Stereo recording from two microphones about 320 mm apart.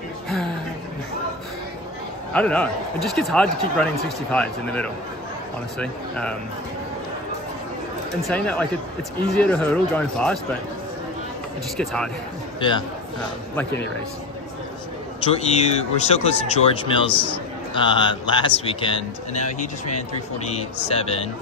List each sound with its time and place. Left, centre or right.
2.3 s speech: centre
8.3 s speech: centre
11.7 s speech: centre
12.5 s a man's voice: centre
15.3 s speech: centre